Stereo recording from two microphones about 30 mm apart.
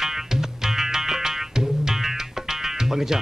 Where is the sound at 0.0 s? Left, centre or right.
Centre.